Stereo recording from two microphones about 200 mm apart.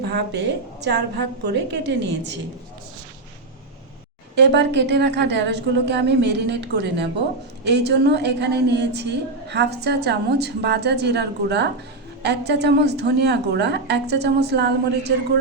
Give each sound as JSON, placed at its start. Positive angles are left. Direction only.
{"t": 0.1, "sound": "a woman's voice", "side_deg": -60}
{"t": 4.4, "sound": "a woman's voice", "side_deg": -60}